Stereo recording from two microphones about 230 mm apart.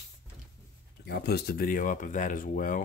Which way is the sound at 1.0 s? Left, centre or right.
Left.